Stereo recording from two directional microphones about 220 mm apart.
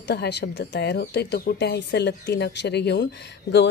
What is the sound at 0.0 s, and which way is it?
Speech, 50° left (ahead or behind).